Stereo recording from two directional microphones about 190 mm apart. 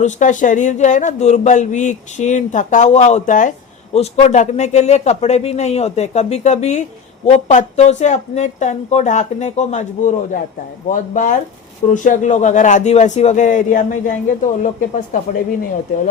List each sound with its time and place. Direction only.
0.0 s a man's voice: 40° left (ahead or behind)